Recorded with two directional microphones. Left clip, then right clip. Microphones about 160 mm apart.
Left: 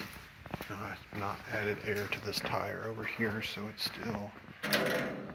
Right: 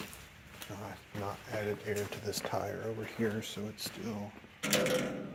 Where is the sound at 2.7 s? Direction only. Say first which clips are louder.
Even; 10° right (ahead or behind).